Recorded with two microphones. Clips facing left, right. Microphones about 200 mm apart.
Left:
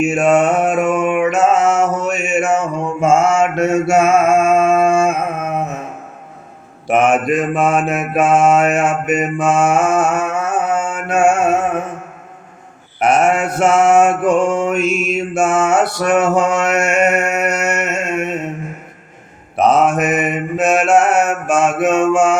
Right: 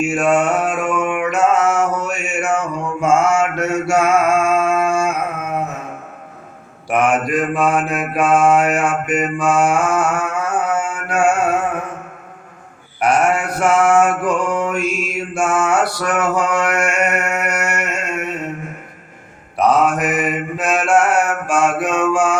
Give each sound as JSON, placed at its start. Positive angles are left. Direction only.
{"t": 0.0, "sound": "mantra", "side_deg": 20}
{"t": 6.8, "sound": "mantra", "side_deg": 25}
{"t": 13.0, "sound": "mantra", "side_deg": 20}
{"t": 19.5, "sound": "mantra", "side_deg": 20}